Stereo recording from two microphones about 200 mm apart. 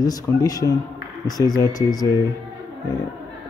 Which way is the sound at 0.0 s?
20° left (ahead or behind).